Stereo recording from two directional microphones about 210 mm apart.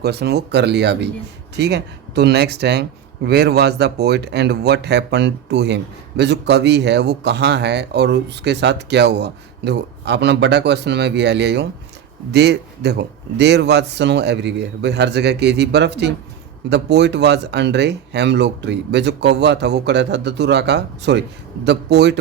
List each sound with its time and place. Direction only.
0.0 s speech: 50° right (ahead or behind)